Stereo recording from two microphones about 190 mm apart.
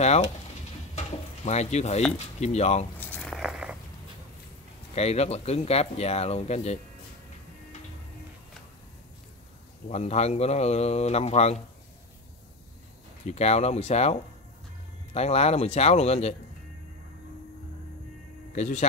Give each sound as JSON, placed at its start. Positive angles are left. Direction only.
{"t": 0.9, "sound": "a sound", "side_deg": 35}
{"t": 2.1, "sound": "speech", "side_deg": 35}
{"t": 3.0, "sound": "a sound", "side_deg": 5}
{"t": 4.9, "sound": "speech", "side_deg": 35}
{"t": 9.8, "sound": "speech", "side_deg": 35}
{"t": 13.3, "sound": "speech", "side_deg": 35}
{"t": 18.5, "sound": "speech", "side_deg": 40}